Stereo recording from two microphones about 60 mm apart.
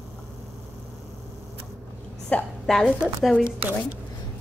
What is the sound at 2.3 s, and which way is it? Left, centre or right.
Speech, left.